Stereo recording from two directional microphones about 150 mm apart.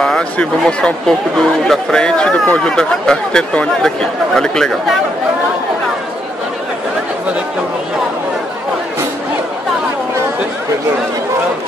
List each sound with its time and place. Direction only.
0.0 s speech: 5° left (ahead or behind)